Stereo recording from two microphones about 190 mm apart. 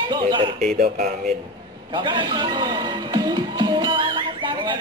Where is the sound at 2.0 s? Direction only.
25° right (ahead or behind).